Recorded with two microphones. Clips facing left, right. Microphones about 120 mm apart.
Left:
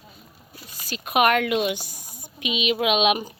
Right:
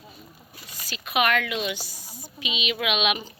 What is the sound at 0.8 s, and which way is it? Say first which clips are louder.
A woman's voice: left 4 dB; 45° left (ahead or behind).